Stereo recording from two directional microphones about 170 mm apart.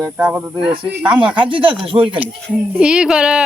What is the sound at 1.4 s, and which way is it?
Speech, 30° right (ahead or behind).